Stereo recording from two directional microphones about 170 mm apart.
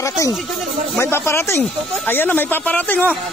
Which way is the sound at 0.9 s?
15° left (ahead or behind).